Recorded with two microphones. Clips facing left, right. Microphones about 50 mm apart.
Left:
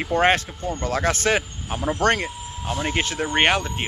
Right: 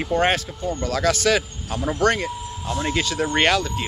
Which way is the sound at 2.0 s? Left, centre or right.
Left.